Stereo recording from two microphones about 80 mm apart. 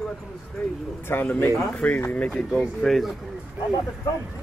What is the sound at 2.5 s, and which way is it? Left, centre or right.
Speech, centre.